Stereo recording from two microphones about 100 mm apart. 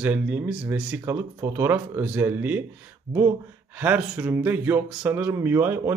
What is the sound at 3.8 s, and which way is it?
Speech, 15° right (ahead or behind).